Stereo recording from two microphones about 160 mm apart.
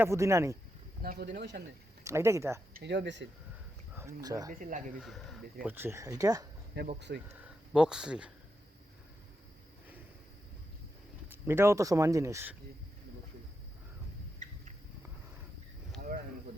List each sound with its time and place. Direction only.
0.0 s speech: 20° right (ahead or behind)
1.0 s speech: 80° right
2.0 s speech: 15° right (ahead or behind)
2.7 s speech: 90° right
3.9 s speech: 20° right (ahead or behind)
4.5 s speech: 55° right (ahead or behind)
4.9 s speech: centre (ahead or behind)
5.6 s speech: 15° right (ahead or behind)
6.8 s speech: 90° right
7.3 s speech: 10° right (ahead or behind)
11.3 s speech: 15° right (ahead or behind)